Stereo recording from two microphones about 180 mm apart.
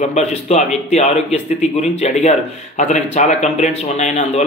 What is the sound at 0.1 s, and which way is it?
Speech, 35° left (ahead or behind).